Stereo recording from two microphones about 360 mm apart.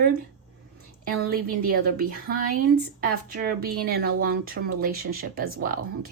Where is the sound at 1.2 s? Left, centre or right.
Right.